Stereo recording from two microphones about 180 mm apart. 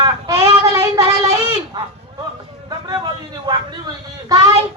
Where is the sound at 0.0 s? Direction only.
20° right (ahead or behind).